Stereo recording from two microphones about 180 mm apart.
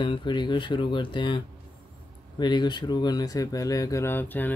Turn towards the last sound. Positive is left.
turn(degrees=10)  # may be behind; listen again after turning